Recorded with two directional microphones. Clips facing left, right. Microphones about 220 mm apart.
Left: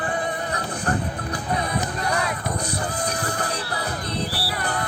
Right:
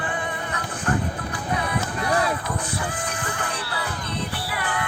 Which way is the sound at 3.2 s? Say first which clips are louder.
Left 3 dB; 40° left (ahead or behind).